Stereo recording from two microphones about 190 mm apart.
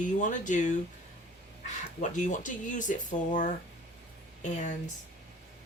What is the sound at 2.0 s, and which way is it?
Speech, 40° left (ahead or behind).